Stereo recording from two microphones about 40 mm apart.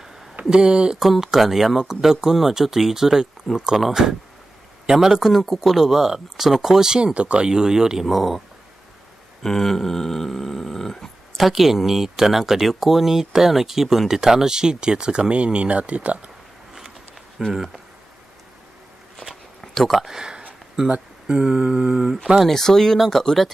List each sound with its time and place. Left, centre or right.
0.5 s speech: right
0.9 s speech: centre
4.8 s speech: centre
7.2 s speech: right
8.1 s speech: centre
9.4 s a sound: centre
11.3 s speech: centre; by 16.3 s right
17.4 s speech: centre
19.6 s a sound: centre
20.0 s speech: centre
20.9 s speech: right
22.4 s a sound: centre
22.9 s speech: centre